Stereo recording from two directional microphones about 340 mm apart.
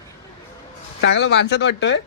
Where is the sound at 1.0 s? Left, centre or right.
Left.